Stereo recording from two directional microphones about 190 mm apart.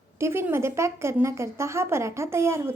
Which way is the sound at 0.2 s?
15° right (ahead or behind).